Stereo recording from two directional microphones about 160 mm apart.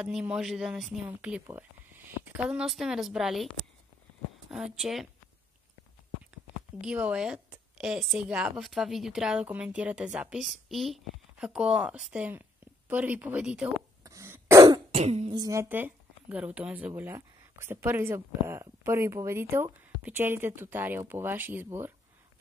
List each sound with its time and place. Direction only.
0.0 s a woman's voice: 5° right (ahead or behind)
4.7 s a woman's voice: centre (ahead or behind)
6.8 s a woman's voice: 5° right (ahead or behind)
14.0 s cough: 15° right (ahead or behind)
14.9 s throat clearing: 40° right (ahead or behind)
15.2 s speech: 25° right (ahead or behind)